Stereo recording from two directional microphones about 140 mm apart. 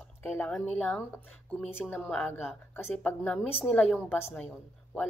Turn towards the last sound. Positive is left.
turn(degrees=10)  # may be behind; listen again after turning